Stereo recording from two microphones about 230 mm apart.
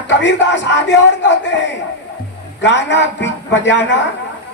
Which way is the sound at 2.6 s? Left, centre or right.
Left.